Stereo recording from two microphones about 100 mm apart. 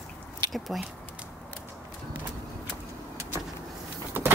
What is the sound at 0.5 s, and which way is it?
Speech, centre (ahead or behind).